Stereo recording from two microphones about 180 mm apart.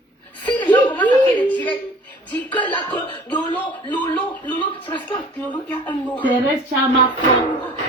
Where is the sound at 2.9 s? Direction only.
25° left (ahead or behind).